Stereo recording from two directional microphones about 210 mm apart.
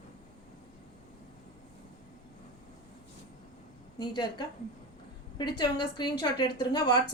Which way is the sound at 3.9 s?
20° left (ahead or behind).